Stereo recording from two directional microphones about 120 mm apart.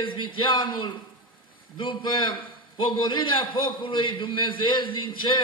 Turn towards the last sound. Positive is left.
turn(degrees=40)  # may be behind; listen again after turning